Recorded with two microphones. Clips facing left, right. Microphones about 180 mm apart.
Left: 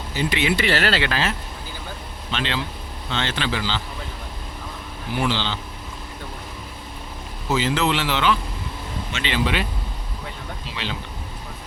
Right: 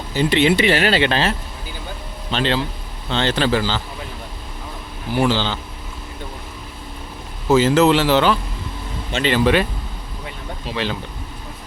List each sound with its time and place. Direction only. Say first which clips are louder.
0.2 s speech: right 7 dB; 30° right (ahead or behind)
0.6 s speech: right 5 dB; 15° right (ahead or behind)
2.3 s speech: right 6 dB; 35° right (ahead or behind)
5.1 s speech: right 5 dB; 40° right (ahead or behind)
7.5 s speech: right 8 dB; 45° right (ahead or behind)